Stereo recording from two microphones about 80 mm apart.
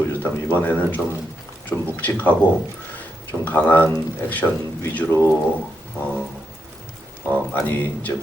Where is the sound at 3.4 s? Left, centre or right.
Left.